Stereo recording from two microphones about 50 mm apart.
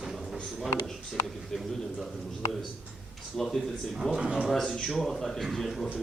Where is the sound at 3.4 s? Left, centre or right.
Centre.